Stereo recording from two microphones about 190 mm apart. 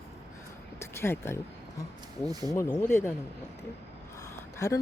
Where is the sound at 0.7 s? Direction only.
15° left (ahead or behind).